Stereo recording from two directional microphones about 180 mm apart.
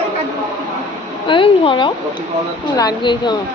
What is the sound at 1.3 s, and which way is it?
Speech, 30° left (ahead or behind).